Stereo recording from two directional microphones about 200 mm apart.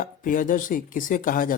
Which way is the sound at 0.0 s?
40° left (ahead or behind).